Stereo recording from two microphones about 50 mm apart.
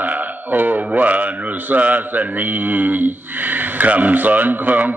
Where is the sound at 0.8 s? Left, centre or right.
Right.